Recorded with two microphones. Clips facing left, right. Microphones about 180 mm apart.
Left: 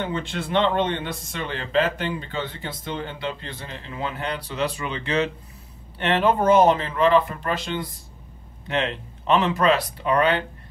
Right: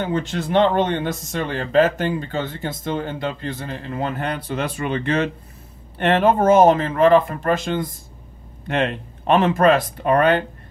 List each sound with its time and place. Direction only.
0.0 s speech: 45° right (ahead or behind)